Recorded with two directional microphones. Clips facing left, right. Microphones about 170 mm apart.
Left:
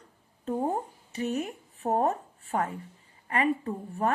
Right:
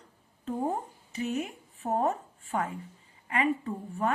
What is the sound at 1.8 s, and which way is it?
A woman's voice, 35° left (ahead or behind).